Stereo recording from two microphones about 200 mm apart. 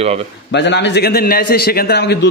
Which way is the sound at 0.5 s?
60° left (ahead or behind).